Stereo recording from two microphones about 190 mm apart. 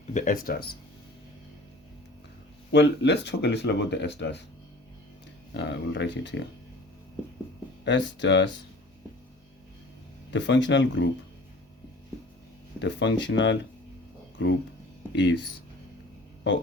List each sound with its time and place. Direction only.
0.1 s speech: 40° left (ahead or behind)
2.7 s speech: 65° left (ahead or behind)
5.5 s speech: 70° left (ahead or behind)
7.9 s speech: 70° left (ahead or behind)
10.3 s speech: 70° left (ahead or behind)
12.8 s speech: 70° left (ahead or behind)
15.1 s speech: 65° left (ahead or behind)